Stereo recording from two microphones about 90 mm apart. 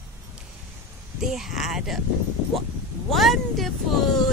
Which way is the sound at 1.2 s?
5° right (ahead or behind).